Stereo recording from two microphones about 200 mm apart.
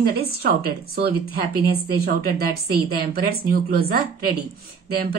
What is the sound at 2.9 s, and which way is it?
A woman's voice, 50° right (ahead or behind).